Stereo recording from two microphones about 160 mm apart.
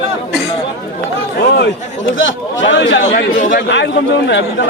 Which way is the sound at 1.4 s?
90° left.